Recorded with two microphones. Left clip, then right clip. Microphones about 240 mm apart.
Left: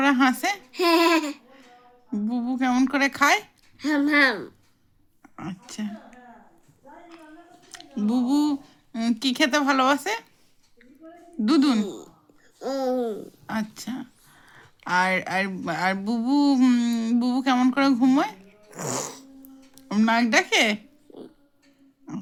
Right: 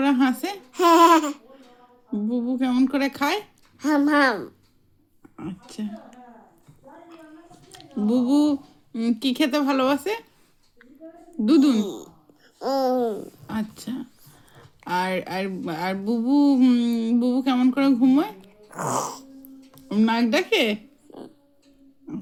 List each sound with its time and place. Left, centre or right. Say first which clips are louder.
0.0 s speech: left 2 dB; left
0.8 s a sound: right 5 dB; centre
2.1 s speech: right 2 dB; left
7.7 s speech: right 3 dB; left
11.4 s speech: right 2 dB; left
12.5 s speech: right 4 dB; centre
18.7 s a sound: right 5 dB; centre
19.7 s speech: left 1 dB; left